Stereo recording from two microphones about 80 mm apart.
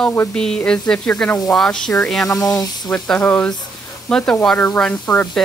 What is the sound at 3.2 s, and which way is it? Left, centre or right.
Speech, left.